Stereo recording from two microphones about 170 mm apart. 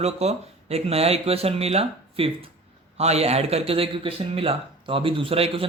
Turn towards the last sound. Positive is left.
turn(degrees=-35)  # may be behind; listen again after turning